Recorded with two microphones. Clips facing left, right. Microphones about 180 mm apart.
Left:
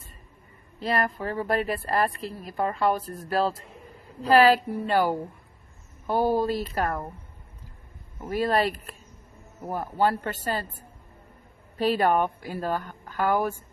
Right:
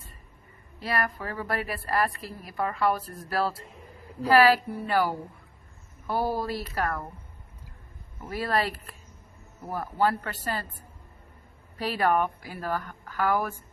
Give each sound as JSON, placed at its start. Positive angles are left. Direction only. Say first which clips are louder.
{"t": 0.7, "sound": "speech", "louder": "left 3 dB", "side_deg": 25}
{"t": 8.2, "sound": "speech", "louder": "left 4 dB", "side_deg": 20}
{"t": 11.8, "sound": "speech", "louder": "left 3 dB", "side_deg": 20}